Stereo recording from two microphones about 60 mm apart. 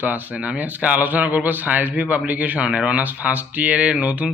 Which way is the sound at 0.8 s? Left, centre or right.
Right.